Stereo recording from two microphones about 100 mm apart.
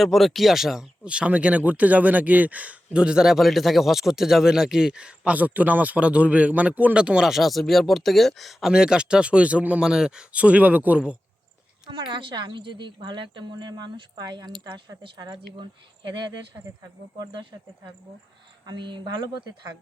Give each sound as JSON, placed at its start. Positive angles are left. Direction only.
{"t": 0.0, "sound": "speech", "side_deg": 0}
{"t": 11.9, "sound": "a woman's voice", "side_deg": -55}
{"t": 18.6, "sound": "a woman's voice", "side_deg": -50}